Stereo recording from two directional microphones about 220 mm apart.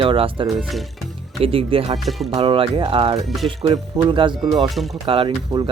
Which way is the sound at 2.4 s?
25° right (ahead or behind).